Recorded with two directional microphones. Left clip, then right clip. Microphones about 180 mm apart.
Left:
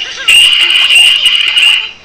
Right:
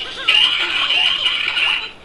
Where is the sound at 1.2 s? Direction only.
25° right (ahead or behind).